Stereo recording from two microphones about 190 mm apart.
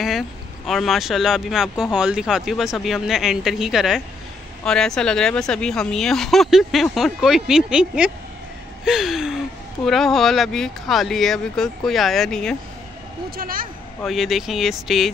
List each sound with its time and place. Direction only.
0.7 s speech: centre (ahead or behind)
8.8 s gasp: centre (ahead or behind)
9.8 s speech: centre (ahead or behind)
13.4 s speech: 50° right (ahead or behind)
14.0 s speech: centre (ahead or behind)